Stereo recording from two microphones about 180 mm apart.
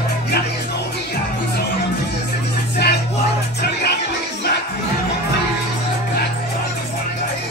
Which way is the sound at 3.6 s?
65° left (ahead or behind).